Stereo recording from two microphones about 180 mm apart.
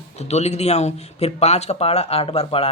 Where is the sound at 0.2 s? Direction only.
35° left (ahead or behind).